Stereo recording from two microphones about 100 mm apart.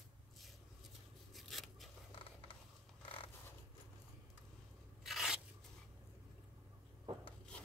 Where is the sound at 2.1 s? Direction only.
60° left (ahead or behind).